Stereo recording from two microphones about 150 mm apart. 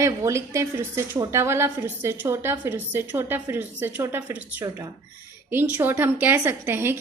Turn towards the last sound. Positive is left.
turn(degrees=-15)  # may be behind; listen again after turning